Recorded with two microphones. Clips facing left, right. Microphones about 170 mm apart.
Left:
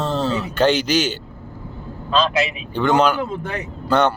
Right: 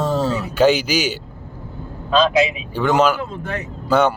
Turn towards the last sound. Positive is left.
turn(degrees=-5)  # may be behind; listen again after turning